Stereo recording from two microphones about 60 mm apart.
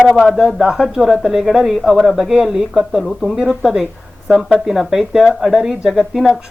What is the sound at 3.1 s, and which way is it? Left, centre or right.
Speech, centre.